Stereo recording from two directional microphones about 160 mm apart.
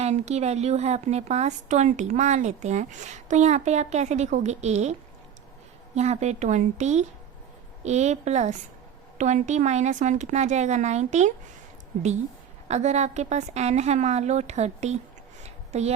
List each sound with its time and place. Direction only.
0.0 s a woman's voice: 45° right (ahead or behind)
12.6 s a woman's voice: 45° right (ahead or behind)
15.4 s a sound: 45° right (ahead or behind)